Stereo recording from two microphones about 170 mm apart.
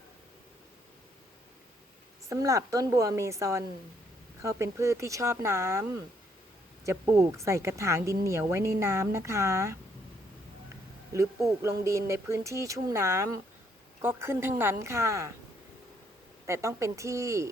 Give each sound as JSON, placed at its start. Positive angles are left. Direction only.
{"t": 2.3, "sound": "a woman's voice", "side_deg": -20}
{"t": 6.8, "sound": "speech", "side_deg": -20}
{"t": 11.1, "sound": "speech", "side_deg": -15}
{"t": 16.5, "sound": "speech", "side_deg": -15}